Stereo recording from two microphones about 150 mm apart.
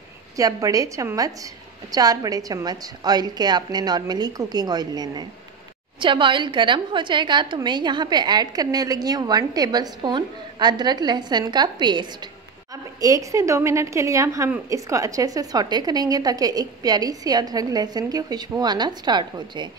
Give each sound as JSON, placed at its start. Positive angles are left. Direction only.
{"t": 0.4, "sound": "a woman's voice", "side_deg": -25}